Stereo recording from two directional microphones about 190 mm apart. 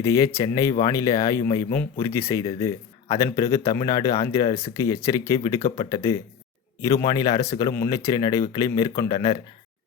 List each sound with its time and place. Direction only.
0.0 s speech: 15° left (ahead or behind)